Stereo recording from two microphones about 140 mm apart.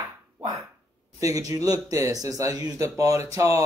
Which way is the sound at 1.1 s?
25° right (ahead or behind).